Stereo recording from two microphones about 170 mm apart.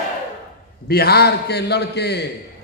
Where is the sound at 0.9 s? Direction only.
65° left (ahead or behind).